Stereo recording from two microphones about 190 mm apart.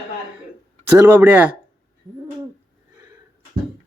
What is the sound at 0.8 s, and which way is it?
Speech, 10° right (ahead or behind).